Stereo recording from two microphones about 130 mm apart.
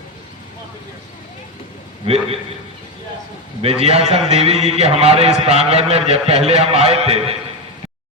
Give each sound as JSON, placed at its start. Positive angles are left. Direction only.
{"t": 2.0, "sound": "a man's voice", "side_deg": -50}
{"t": 3.6, "sound": "a man's voice", "side_deg": -50}